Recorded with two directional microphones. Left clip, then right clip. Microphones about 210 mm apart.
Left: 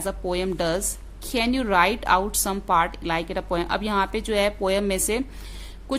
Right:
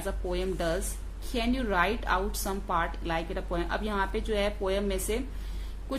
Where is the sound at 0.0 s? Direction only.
50° left (ahead or behind).